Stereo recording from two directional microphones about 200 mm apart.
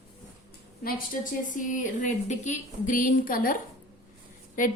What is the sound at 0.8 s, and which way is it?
A woman's voice, 40° left (ahead or behind).